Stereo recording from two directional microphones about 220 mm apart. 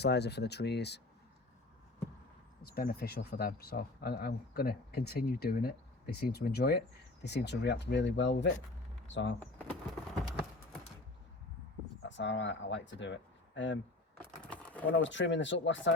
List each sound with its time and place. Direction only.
0.0 s speech: 50° left (ahead or behind)
2.6 s speech: 45° left (ahead or behind)
9.4 s speech: 5° left (ahead or behind)
12.0 s speech: 55° left (ahead or behind)
14.3 s a sound: 5° left (ahead or behind)
14.9 s speech: 55° left (ahead or behind)